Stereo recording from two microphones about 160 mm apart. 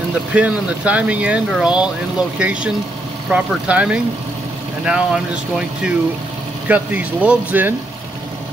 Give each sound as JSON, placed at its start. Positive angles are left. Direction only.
{"t": 0.3, "sound": "speech", "side_deg": -10}